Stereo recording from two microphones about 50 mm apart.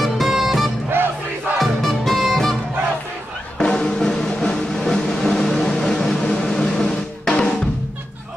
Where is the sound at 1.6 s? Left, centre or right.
Centre.